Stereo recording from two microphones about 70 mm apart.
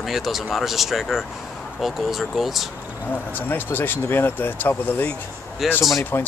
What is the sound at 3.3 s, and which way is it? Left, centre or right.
Speech, left.